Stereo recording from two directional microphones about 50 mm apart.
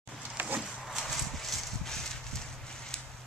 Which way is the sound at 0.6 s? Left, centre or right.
Centre.